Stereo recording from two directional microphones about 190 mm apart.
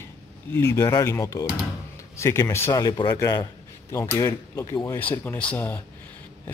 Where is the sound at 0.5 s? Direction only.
15° left (ahead or behind).